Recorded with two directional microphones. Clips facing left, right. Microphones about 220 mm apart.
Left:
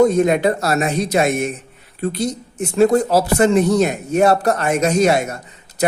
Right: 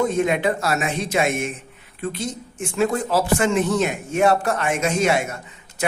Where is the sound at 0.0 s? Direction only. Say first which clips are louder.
Left 6 dB; 40° left (ahead or behind).